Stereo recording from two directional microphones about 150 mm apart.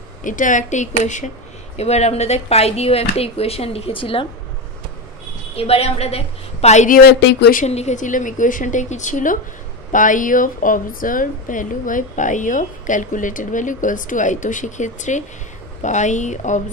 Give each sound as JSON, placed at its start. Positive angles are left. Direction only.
{"t": 0.2, "sound": "a woman's voice", "side_deg": 60}
{"t": 5.6, "sound": "speech", "side_deg": 45}
{"t": 7.0, "sound": "speech", "side_deg": 90}
{"t": 7.6, "sound": "a woman's voice", "side_deg": 50}